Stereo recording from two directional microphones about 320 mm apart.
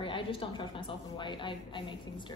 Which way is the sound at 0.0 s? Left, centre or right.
Centre.